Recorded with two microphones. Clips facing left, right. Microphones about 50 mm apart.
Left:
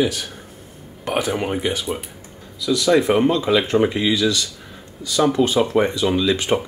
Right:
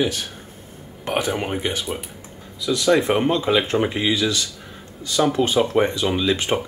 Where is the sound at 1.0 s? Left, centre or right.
Centre.